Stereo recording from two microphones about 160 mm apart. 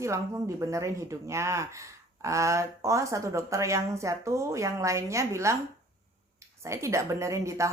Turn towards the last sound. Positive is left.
turn(degrees=-20)  # may be behind; listen again after turning